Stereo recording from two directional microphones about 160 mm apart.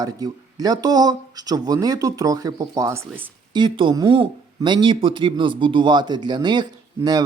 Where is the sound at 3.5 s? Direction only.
30° right (ahead or behind).